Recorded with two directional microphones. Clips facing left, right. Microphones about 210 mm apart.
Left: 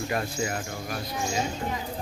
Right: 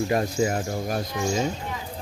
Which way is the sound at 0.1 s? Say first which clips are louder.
Right 6 dB; 30° right (ahead or behind).